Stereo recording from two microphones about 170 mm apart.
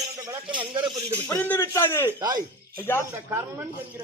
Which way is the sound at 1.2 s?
15° left (ahead or behind).